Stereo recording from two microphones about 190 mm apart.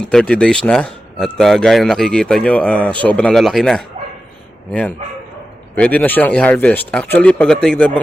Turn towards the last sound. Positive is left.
turn(degrees=5)  # may be behind; listen again after turning